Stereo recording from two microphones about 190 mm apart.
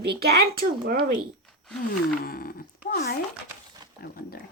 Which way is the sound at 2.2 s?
50° left (ahead or behind).